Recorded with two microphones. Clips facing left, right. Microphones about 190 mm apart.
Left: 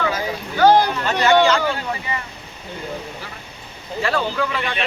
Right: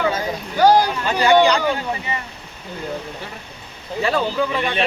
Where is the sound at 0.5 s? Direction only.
10° right (ahead or behind).